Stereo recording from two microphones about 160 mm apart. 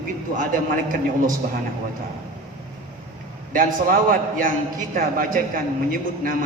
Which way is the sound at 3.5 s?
60° right (ahead or behind).